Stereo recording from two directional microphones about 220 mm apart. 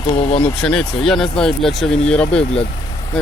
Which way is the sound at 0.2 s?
25° left (ahead or behind).